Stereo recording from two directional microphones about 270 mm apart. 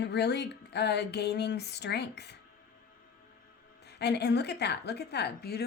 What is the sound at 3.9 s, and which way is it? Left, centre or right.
Speech, left.